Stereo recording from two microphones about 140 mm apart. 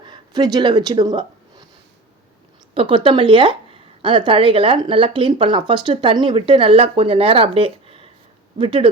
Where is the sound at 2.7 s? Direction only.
40° right (ahead or behind).